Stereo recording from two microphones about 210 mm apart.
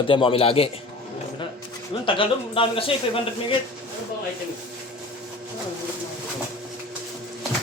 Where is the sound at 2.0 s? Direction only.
25° left (ahead or behind).